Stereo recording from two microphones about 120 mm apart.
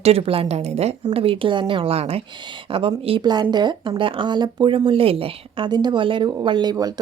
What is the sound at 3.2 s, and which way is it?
A woman's voice, 35° right (ahead or behind).